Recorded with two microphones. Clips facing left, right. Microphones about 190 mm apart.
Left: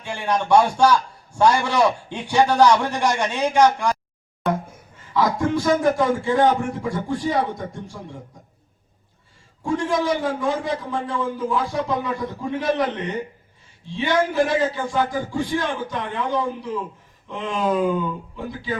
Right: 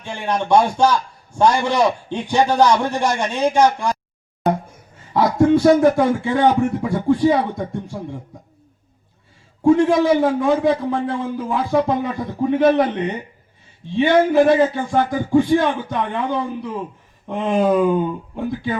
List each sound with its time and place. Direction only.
0.0 s speech: 15° right (ahead or behind)
5.6 s a man's voice: 60° right (ahead or behind)
9.6 s a man's voice: 60° right (ahead or behind)